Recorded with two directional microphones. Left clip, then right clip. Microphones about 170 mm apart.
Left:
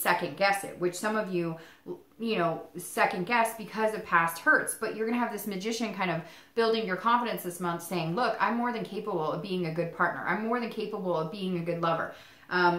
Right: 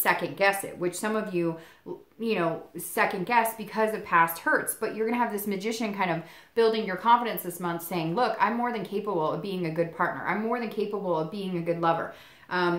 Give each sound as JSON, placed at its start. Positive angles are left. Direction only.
{"t": 0.0, "sound": "a woman's voice", "side_deg": -50}